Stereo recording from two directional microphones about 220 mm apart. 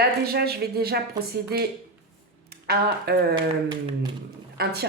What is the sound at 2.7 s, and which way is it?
Speech, 45° right (ahead or behind).